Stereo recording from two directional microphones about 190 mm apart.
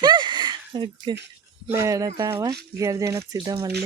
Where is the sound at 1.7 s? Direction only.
15° right (ahead or behind).